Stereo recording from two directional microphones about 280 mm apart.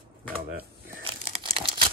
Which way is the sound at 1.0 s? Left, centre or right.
Centre.